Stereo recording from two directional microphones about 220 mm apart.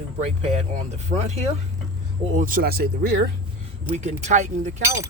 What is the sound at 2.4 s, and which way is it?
Speech, 40° right (ahead or behind).